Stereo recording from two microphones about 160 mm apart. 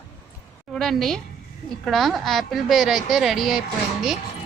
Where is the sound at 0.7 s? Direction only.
Centre (ahead or behind).